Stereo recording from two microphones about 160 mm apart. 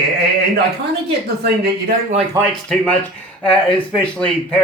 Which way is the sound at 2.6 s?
5° left (ahead or behind).